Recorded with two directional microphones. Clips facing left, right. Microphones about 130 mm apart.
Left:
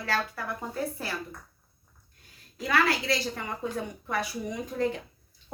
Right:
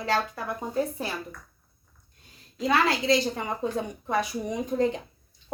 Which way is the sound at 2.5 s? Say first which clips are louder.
Right 2 dB; 20° right (ahead or behind).